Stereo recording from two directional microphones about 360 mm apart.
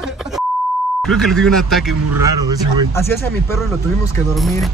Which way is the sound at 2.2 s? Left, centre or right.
Centre.